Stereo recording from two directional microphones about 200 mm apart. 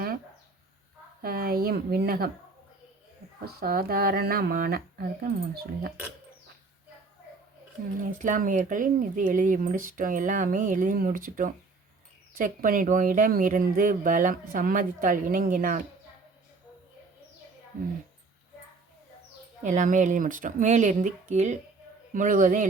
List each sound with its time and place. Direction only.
1.2 s speech: 45° right (ahead or behind)
3.4 s speech: 50° right (ahead or behind)
8.2 s speech: 40° right (ahead or behind)
19.6 s speech: 40° right (ahead or behind)